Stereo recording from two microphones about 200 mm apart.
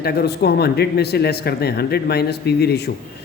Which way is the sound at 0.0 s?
50° left (ahead or behind).